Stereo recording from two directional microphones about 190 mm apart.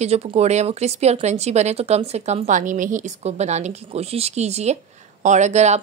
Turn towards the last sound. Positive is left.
turn(degrees=-35)  # may be behind; listen again after turning